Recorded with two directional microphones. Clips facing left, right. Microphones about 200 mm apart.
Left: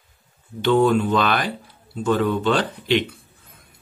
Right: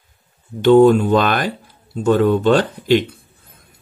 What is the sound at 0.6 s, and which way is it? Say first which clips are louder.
Speech: right 7 dB; 45° right (ahead or behind).